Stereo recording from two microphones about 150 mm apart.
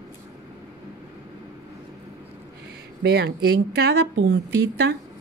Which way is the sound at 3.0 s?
90° right.